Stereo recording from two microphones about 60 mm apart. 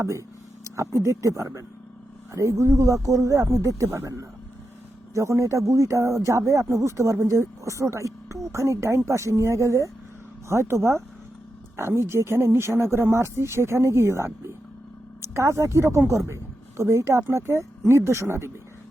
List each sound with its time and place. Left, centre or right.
0.0 s speech: right